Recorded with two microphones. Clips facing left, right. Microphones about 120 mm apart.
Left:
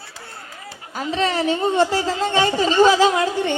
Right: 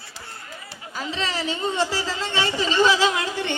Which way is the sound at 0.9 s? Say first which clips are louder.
Left 7 dB; 50° left (ahead or behind).